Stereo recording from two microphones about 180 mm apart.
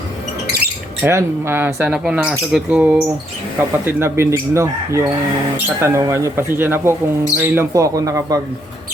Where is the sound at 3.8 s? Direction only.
10° right (ahead or behind).